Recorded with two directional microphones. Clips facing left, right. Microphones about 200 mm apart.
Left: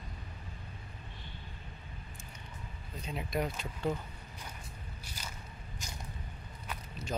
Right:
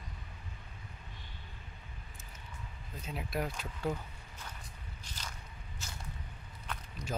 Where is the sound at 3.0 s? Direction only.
5° right (ahead or behind).